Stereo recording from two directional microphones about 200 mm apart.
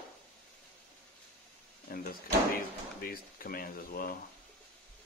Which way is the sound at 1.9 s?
45° left (ahead or behind).